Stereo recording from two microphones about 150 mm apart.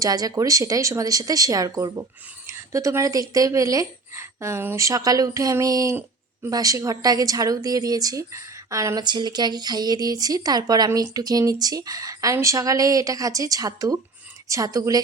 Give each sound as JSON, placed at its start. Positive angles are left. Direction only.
{"t": 0.0, "sound": "speech", "side_deg": -25}